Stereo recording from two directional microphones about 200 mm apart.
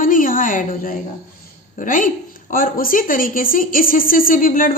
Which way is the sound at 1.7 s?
40° left (ahead or behind).